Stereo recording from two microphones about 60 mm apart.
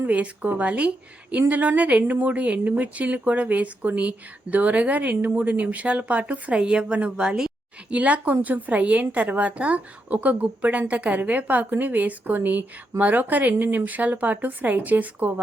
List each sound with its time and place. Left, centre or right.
0.1 s a woman's voice: right
7.9 s a woman's voice: right